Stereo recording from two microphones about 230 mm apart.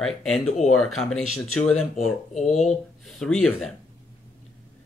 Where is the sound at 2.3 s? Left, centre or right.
Left.